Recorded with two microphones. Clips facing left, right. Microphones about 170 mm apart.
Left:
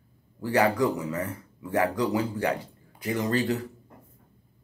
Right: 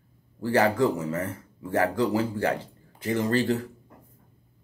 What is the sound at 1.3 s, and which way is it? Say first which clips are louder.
A man's voice: right 1 dB; 30° right (ahead or behind).